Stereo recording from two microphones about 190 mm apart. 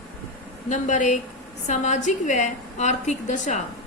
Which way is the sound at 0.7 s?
40° left (ahead or behind).